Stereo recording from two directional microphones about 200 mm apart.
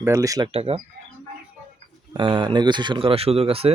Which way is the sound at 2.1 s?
25° right (ahead or behind).